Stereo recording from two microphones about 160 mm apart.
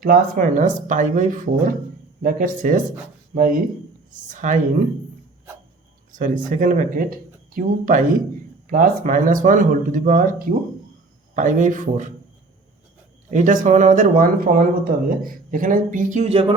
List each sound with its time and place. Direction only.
0.0 s speech: 60° right (ahead or behind)
6.1 s speech: 55° right (ahead or behind)
13.3 s speech: 55° right (ahead or behind)